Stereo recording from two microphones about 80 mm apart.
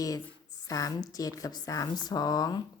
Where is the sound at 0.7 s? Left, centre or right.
Left.